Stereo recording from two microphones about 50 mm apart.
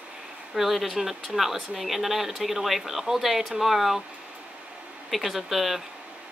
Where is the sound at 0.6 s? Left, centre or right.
Centre.